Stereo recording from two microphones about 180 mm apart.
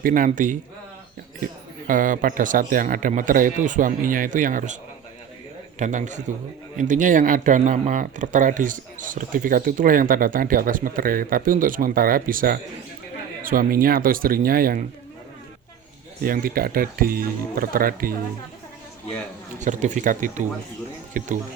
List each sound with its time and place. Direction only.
0.0 s speech: 50° right (ahead or behind)
1.9 s speech: 45° right (ahead or behind)
5.8 s speech: 45° right (ahead or behind)
16.2 s speech: 55° right (ahead or behind)
19.5 s speech: 40° right (ahead or behind)